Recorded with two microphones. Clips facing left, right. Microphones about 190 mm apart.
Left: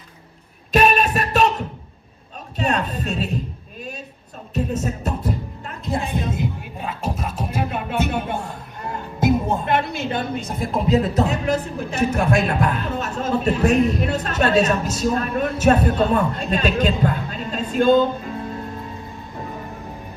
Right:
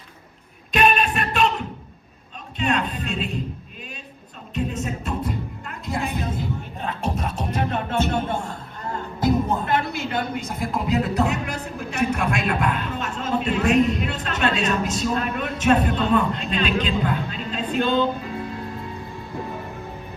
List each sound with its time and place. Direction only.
0.7 s music: 40° left (ahead or behind)
2.6 s a sound: 40° left (ahead or behind)
4.5 s music: 40° left (ahead or behind); by 6.5 s 25° left (ahead or behind)
6.7 s music: 5° left (ahead or behind)
9.2 s music: 25° left (ahead or behind)
10.5 s a man's voice: 30° left (ahead or behind)